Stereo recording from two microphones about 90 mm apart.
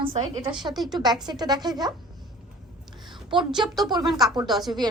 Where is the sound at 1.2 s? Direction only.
50° right (ahead or behind).